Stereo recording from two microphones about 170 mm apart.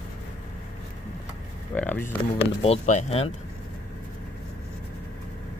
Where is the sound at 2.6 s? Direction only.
40° left (ahead or behind).